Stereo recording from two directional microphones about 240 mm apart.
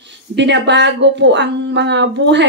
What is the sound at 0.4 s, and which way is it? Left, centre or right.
A woman's voice, right.